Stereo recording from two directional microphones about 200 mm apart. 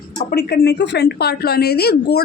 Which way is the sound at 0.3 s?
55° left (ahead or behind).